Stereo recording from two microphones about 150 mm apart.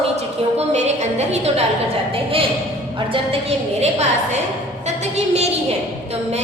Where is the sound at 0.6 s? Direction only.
50° right (ahead or behind).